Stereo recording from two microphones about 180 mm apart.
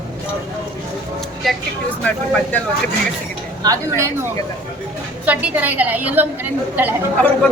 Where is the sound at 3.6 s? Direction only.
15° right (ahead or behind).